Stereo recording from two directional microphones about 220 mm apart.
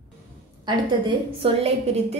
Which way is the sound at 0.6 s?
25° right (ahead or behind).